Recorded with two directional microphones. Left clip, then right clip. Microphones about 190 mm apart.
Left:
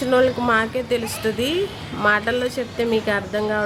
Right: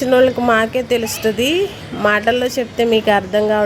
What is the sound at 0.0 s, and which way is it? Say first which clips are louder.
A woman's voice: right 5 dB; 15° right (ahead or behind).